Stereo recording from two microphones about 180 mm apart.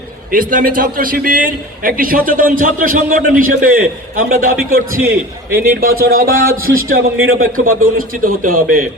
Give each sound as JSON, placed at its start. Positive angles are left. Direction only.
{"t": 0.3, "sound": "a man's voice", "side_deg": -50}
{"t": 5.0, "sound": "a man's voice", "side_deg": -10}
{"t": 5.6, "sound": "a man's voice", "side_deg": -55}